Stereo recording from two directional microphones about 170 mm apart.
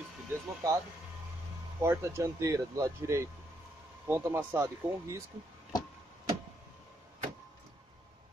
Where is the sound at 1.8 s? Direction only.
15° right (ahead or behind).